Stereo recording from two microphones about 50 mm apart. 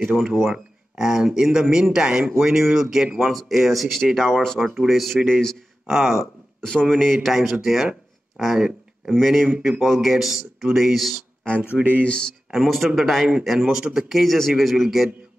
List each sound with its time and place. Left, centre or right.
0.2 s speech: centre
4.6 s speech: centre
5.9 s speech: centre
6.6 s speech: centre
7.2 s speech: centre
9.1 s speech: centre
12.0 s speech: centre
12.4 s speech: centre